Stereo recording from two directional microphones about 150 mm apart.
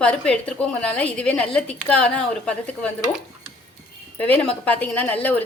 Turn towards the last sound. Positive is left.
turn(degrees=10)  # may be behind; listen again after turning